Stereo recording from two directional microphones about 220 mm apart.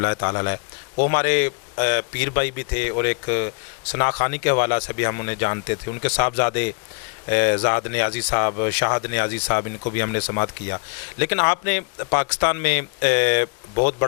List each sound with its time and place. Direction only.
0.0 s a man's voice: 20° left (ahead or behind)